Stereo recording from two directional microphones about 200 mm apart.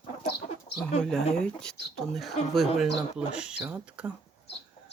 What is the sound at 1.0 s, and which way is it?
Speech, 5° left (ahead or behind).